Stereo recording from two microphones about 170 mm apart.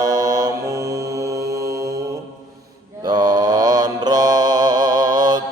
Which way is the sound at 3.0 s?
25° right (ahead or behind).